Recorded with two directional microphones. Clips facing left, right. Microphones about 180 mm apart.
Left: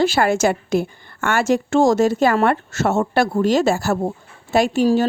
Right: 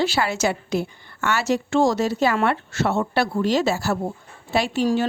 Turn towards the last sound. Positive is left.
turn(degrees=45)  # may be behind; listen again after turning